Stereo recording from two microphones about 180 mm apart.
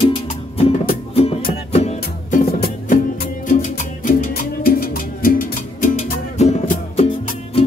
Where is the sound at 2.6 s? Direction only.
50° left (ahead or behind).